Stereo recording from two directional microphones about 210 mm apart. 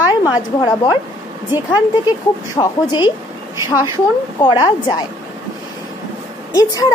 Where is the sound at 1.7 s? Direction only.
20° left (ahead or behind).